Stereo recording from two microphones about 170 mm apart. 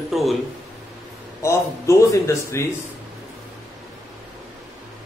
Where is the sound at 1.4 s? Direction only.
15° left (ahead or behind).